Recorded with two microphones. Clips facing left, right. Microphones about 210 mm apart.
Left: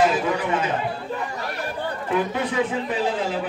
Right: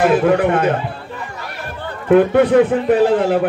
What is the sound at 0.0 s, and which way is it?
Speech, 60° right (ahead or behind).